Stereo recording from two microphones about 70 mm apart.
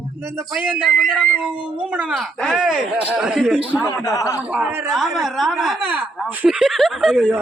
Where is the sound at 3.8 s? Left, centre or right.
Left.